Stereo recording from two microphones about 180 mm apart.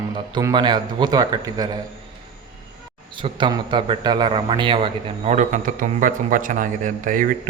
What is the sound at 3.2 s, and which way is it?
A man's voice, 25° right (ahead or behind).